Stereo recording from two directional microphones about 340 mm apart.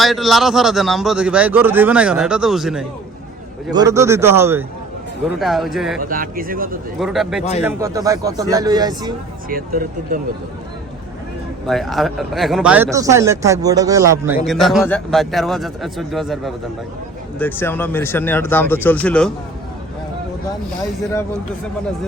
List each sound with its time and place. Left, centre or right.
0.0 s speech: centre
6.1 s speech: right
7.0 s speech: centre
9.5 s speech: right
11.6 s speech: centre